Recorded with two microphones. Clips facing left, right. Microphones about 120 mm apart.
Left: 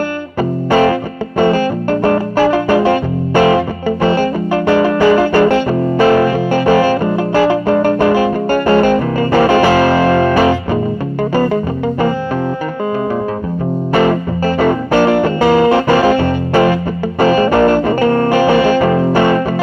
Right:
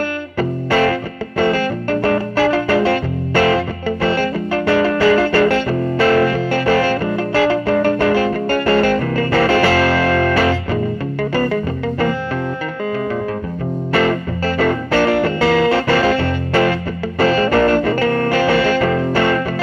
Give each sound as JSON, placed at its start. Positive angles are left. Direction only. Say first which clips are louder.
{"t": 0.4, "sound": "music", "louder": "left 4 dB", "side_deg": 15}
{"t": 13.9, "sound": "music", "louder": "left 4 dB", "side_deg": 15}